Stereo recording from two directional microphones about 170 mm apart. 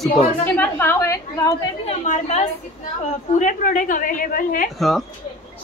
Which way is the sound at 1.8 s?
45° left (ahead or behind).